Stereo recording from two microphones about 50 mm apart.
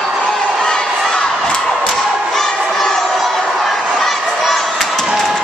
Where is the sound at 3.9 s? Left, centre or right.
Centre.